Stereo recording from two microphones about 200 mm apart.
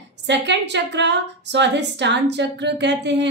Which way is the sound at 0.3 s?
60° right (ahead or behind).